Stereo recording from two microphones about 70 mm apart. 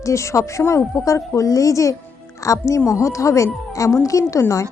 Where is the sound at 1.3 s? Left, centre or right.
Left.